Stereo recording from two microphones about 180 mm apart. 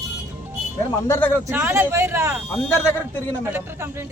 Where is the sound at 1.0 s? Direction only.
15° left (ahead or behind).